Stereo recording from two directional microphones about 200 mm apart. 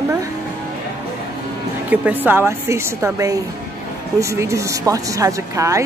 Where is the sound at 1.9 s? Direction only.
10° right (ahead or behind).